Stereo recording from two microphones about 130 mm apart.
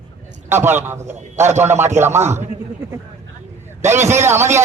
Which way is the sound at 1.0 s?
65° right (ahead or behind).